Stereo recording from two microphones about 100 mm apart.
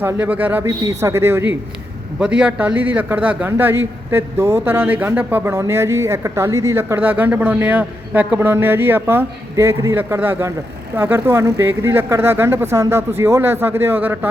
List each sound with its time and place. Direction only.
0.0 s a man's voice: 20° right (ahead or behind)
2.1 s a man's voice: 10° right (ahead or behind)